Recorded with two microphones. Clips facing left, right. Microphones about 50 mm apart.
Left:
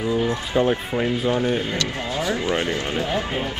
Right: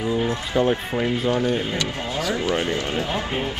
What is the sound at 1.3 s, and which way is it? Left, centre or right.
Speech, centre.